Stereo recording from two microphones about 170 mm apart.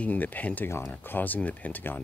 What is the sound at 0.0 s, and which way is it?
Speech, 10° left (ahead or behind).